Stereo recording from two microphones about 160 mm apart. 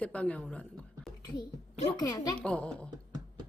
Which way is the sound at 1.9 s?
20° left (ahead or behind).